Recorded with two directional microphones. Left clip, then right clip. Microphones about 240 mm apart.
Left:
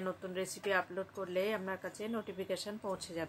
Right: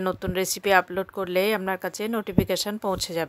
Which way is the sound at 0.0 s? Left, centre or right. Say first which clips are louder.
Right 13 dB; right.